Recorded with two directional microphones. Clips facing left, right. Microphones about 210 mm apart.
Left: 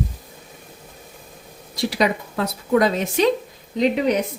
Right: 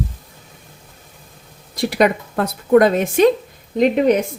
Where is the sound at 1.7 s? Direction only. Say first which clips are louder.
Right 4 dB; 55° right (ahead or behind).